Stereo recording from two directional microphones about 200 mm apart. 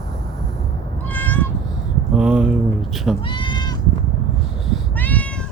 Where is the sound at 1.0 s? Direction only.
10° left (ahead or behind).